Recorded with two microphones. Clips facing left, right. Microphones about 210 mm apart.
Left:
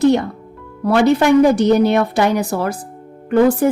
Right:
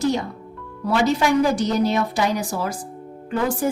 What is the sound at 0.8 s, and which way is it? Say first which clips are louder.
Speech: left 6 dB; 60° left (ahead or behind).